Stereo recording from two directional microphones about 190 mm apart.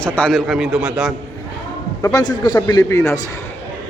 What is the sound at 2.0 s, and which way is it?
A man's voice, 20° left (ahead or behind).